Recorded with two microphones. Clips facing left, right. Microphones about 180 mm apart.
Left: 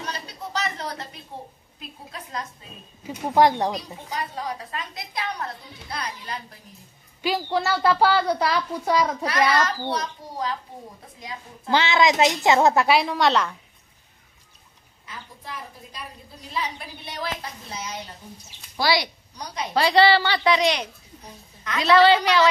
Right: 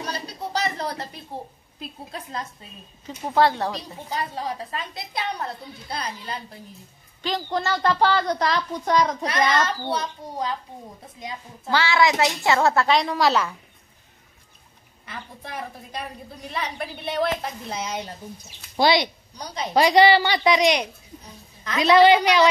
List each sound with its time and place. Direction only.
0.0 s a sound: 35° right (ahead or behind)
3.1 s a woman's voice: 15° left (ahead or behind)
4.1 s a woman's voice: 30° right (ahead or behind)
7.2 s a woman's voice: 10° left (ahead or behind)
9.6 s a woman's voice: 25° right (ahead or behind)
11.7 s a woman's voice: 20° left (ahead or behind); by 13.6 s 5° right (ahead or behind)
15.0 s a woman's voice: 65° right (ahead or behind)
18.8 s a woman's voice: 20° right (ahead or behind)